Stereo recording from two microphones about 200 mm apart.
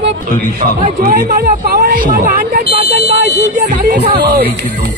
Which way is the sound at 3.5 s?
40° right (ahead or behind).